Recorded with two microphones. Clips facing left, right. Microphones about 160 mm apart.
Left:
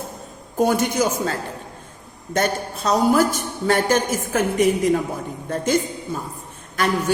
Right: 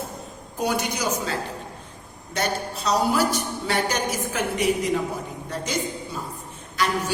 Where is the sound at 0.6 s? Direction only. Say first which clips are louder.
Left 7 dB; 50° left (ahead or behind).